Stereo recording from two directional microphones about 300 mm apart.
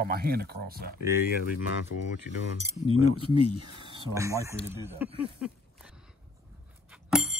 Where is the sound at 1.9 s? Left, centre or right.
Left.